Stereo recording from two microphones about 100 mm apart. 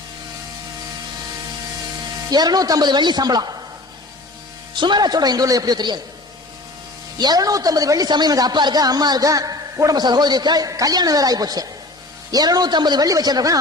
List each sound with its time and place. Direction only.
2.3 s a woman's voice: 40° right (ahead or behind)
4.7 s a woman's voice: 50° right (ahead or behind)
7.2 s a man's voice: 40° right (ahead or behind)